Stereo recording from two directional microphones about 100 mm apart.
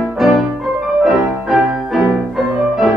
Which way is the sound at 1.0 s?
Centre (ahead or behind).